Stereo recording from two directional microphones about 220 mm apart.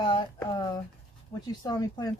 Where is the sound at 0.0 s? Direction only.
20° left (ahead or behind).